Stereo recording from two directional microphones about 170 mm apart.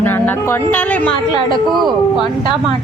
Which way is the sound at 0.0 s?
10° left (ahead or behind).